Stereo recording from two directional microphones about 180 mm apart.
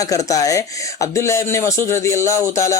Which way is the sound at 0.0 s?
20° left (ahead or behind).